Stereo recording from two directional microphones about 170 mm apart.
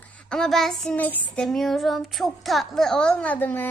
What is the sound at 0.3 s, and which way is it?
Child singing, 5° left (ahead or behind).